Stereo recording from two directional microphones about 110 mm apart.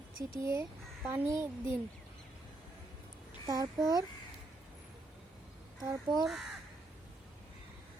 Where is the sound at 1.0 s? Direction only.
20° right (ahead or behind).